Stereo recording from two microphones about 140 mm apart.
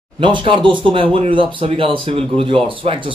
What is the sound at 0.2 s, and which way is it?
Speech, 35° right (ahead or behind).